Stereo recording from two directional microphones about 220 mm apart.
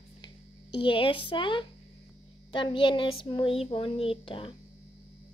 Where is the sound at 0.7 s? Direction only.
25° left (ahead or behind).